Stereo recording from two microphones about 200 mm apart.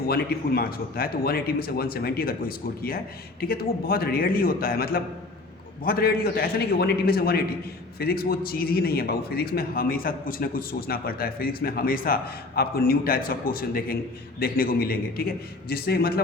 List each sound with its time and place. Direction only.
0.1 s a man's voice: 50° left (ahead or behind)